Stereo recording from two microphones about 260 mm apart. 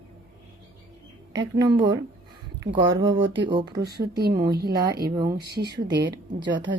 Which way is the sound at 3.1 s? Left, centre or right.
Right.